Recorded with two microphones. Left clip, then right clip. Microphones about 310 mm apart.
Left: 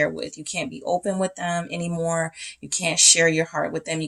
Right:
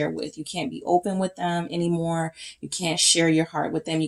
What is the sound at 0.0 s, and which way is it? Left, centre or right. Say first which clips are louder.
Speech: left 4 dB; left.